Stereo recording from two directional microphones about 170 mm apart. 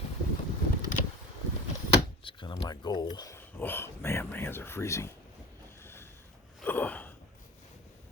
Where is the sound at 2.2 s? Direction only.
30° left (ahead or behind).